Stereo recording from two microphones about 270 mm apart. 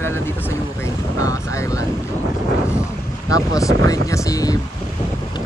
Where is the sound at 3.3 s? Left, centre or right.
Centre.